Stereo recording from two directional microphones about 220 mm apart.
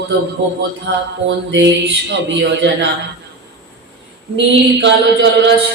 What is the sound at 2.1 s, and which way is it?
Speech, 55° right (ahead or behind).